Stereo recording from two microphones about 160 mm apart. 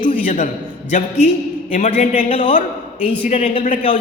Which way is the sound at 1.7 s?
45° left (ahead or behind).